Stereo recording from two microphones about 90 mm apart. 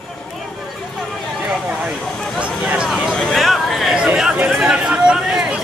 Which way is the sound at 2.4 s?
15° right (ahead or behind).